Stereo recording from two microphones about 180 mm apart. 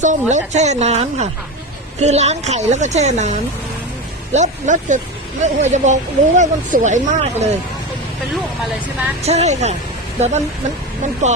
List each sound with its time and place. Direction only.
0.0 s speech: 40° right (ahead or behind)
9.2 s speech: 35° right (ahead or behind)